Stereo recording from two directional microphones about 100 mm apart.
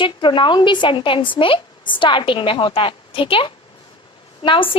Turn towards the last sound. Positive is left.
turn(degrees=60)  # may be behind; listen again after turning